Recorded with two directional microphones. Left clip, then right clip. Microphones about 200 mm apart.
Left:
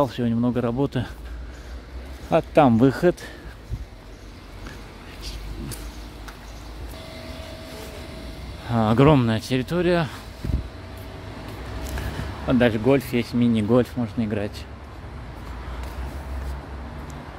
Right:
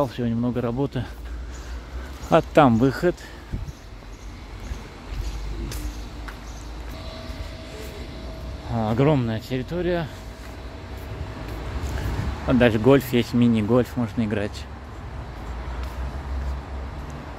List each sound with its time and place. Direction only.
0.0 s speech: 15° left (ahead or behind)
2.2 s speech: centre (ahead or behind)
2.8 s speech: 15° left (ahead or behind)
8.6 s speech: 30° left (ahead or behind)
12.4 s speech: centre (ahead or behind)
13.5 s speech: 10° left (ahead or behind)